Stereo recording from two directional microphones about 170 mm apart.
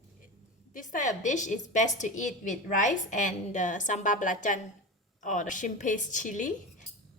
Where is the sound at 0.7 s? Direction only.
50° left (ahead or behind).